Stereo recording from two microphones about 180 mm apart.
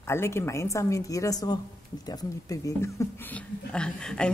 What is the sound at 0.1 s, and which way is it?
A woman's voice, 15° left (ahead or behind).